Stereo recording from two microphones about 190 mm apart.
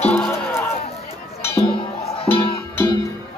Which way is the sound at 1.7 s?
30° left (ahead or behind).